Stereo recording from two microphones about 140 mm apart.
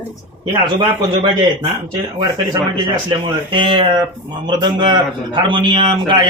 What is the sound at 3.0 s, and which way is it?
A man's voice, 35° right (ahead or behind).